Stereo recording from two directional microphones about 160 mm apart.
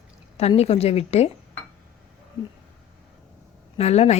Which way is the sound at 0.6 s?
40° left (ahead or behind).